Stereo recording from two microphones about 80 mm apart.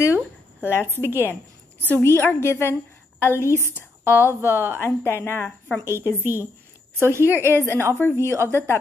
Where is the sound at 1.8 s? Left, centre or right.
Left.